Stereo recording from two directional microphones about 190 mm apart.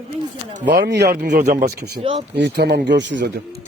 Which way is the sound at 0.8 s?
65° right (ahead or behind).